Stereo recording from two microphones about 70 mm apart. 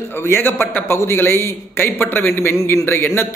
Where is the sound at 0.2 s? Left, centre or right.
Left.